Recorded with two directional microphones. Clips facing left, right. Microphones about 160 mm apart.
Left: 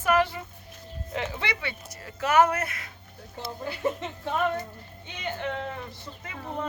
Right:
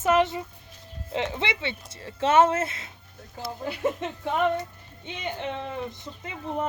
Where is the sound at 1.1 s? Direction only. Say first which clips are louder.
Right 3 dB; 25° right (ahead or behind).